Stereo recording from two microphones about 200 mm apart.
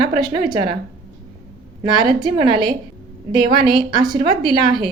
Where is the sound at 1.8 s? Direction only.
25° right (ahead or behind).